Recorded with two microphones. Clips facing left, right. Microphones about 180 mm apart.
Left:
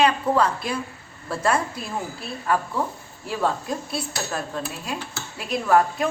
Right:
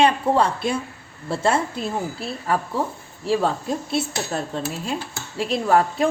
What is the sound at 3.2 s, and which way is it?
Speech, 30° right (ahead or behind).